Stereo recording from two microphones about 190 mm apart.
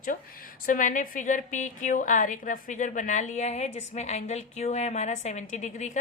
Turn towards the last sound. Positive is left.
turn(degrees=40)  # may be behind; listen again after turning